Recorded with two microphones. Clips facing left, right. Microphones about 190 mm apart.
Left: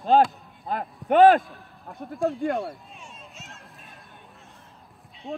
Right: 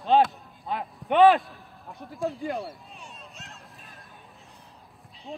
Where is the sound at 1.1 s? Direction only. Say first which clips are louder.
Left 2 dB; 45° left (ahead or behind).